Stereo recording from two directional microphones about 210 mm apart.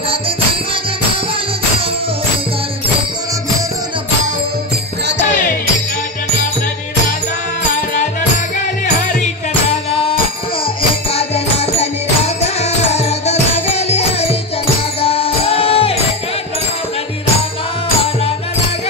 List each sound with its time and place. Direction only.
11.1 s music: 30° left (ahead or behind)